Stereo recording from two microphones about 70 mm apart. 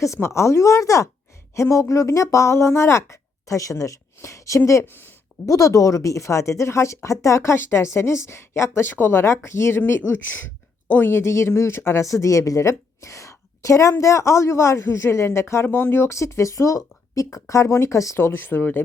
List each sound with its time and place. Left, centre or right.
0.0 s speech: left
12.0 s a woman's voice: left
18.3 s speech: left